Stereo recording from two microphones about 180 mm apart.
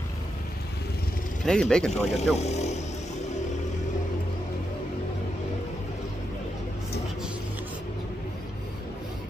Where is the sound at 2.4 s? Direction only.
40° left (ahead or behind).